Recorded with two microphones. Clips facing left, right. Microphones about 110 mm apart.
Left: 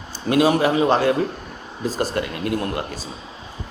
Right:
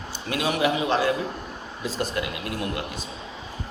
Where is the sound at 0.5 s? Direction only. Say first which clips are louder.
Left 5 dB; 40° left (ahead or behind).